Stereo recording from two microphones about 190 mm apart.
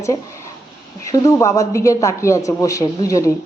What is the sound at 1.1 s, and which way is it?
A woman's voice, 15° left (ahead or behind).